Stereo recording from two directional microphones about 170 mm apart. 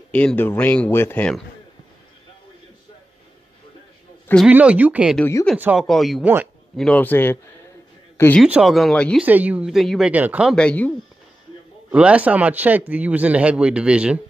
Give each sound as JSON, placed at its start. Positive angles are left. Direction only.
{"t": 0.1, "sound": "speech", "side_deg": 10}
{"t": 4.5, "sound": "speech", "side_deg": -10}
{"t": 5.1, "sound": "speech", "side_deg": 10}
{"t": 5.6, "sound": "speech", "side_deg": -10}
{"t": 6.2, "sound": "speech", "side_deg": -10}
{"t": 6.8, "sound": "speech", "side_deg": 10}
{"t": 8.4, "sound": "speech", "side_deg": -5}
{"t": 9.2, "sound": "speech", "side_deg": -10}
{"t": 10.5, "sound": "speech", "side_deg": 5}
{"t": 11.9, "sound": "speech", "side_deg": -10}